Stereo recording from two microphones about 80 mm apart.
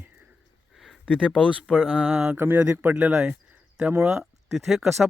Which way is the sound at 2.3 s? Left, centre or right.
Right.